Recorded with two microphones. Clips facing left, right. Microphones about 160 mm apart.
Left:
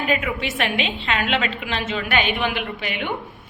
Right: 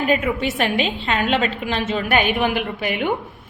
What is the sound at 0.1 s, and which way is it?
A woman's voice, 40° right (ahead or behind).